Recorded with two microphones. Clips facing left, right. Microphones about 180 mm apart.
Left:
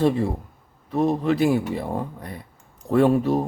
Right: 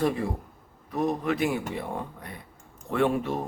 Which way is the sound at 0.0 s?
30° left (ahead or behind).